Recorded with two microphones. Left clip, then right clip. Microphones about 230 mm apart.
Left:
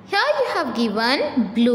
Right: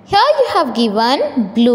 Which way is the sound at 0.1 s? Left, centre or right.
Centre.